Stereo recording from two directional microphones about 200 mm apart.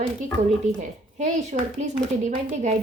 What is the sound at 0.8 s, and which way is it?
Speech, 35° right (ahead or behind).